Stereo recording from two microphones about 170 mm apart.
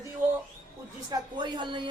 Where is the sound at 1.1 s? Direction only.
25° right (ahead or behind).